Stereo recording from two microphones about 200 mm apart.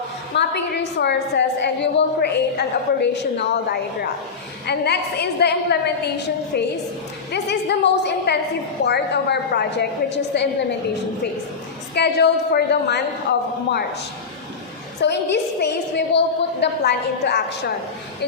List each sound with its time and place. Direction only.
0.3 s a woman's voice: 60° left (ahead or behind)
11.9 s a woman's voice: 55° left (ahead or behind)
15.0 s a woman's voice: 60° left (ahead or behind)